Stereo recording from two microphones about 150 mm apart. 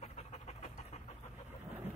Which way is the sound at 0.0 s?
50° left (ahead or behind).